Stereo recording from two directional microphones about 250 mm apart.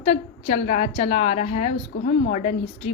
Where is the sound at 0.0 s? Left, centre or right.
Left.